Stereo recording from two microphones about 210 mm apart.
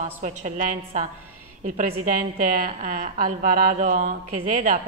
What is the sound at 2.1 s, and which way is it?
A woman's voice, 40° right (ahead or behind).